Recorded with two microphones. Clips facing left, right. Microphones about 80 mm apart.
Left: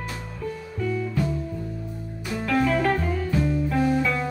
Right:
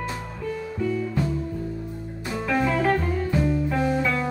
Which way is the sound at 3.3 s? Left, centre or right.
Centre.